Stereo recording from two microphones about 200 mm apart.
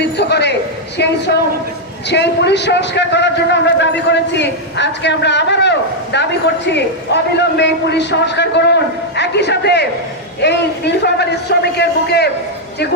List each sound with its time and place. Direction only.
0.0 s a man's voice: 55° left (ahead or behind)